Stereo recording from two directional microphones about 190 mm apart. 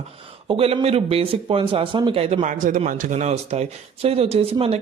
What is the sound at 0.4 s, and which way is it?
A man's voice, 30° right (ahead or behind).